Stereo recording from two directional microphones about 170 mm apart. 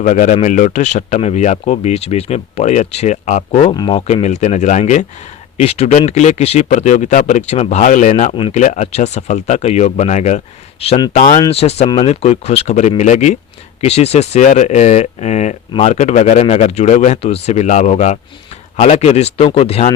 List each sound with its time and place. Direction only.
0.0 s speech: 45° left (ahead or behind)
11.1 s speech: 50° left (ahead or behind)
11.3 s speech: 35° left (ahead or behind)